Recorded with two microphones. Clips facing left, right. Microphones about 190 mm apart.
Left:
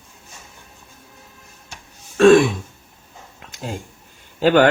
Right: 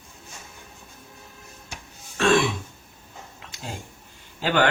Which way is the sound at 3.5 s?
50° left (ahead or behind).